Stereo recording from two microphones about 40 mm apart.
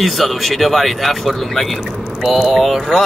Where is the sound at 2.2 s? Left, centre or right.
Centre.